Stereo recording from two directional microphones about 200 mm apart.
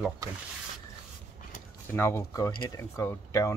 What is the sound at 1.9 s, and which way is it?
Speech, 15° left (ahead or behind).